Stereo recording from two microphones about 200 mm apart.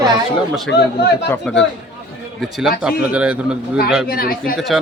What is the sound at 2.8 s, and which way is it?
Speech, 5° right (ahead or behind).